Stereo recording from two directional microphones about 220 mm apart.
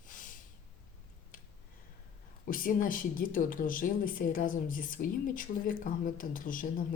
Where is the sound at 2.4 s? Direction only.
40° left (ahead or behind).